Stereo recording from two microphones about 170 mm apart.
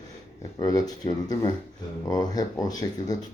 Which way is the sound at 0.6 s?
25° left (ahead or behind).